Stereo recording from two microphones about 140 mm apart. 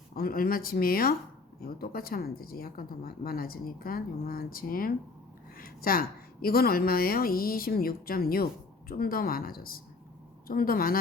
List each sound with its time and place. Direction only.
0.2 s speech: 90° left